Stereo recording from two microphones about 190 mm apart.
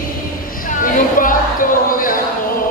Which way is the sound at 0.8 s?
45° left (ahead or behind).